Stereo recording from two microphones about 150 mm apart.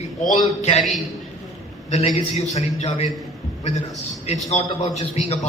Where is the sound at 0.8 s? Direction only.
Centre (ahead or behind).